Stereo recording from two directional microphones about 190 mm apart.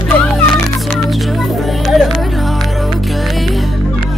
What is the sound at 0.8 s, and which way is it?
Music, centre (ahead or behind).